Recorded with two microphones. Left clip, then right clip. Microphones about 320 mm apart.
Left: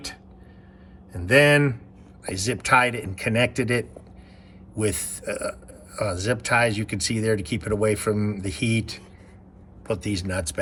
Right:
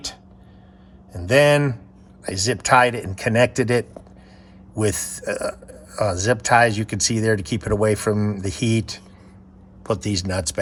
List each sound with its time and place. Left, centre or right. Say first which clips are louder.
1.1 s speech: right 2 dB; centre